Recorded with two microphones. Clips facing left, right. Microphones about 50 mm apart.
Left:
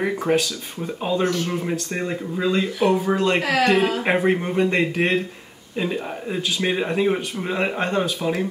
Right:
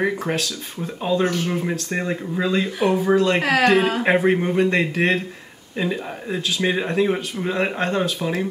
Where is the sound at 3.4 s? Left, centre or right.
Right.